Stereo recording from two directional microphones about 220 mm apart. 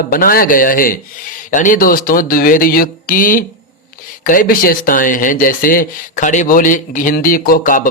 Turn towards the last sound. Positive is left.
turn(degrees=40)  # may be behind; listen again after turning